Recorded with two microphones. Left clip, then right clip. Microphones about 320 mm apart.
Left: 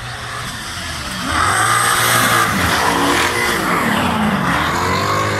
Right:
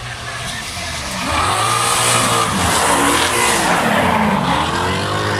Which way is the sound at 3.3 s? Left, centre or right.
Right.